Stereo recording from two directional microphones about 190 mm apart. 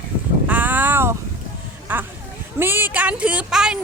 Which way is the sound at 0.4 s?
10° right (ahead or behind).